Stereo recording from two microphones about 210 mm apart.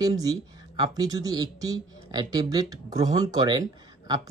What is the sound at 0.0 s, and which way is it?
Speech, 15° right (ahead or behind).